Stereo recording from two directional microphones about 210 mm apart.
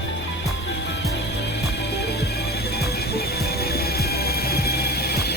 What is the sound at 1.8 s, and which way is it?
Music, 50° left (ahead or behind).